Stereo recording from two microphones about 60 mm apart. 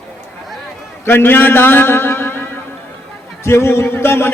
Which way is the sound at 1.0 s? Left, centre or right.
Left.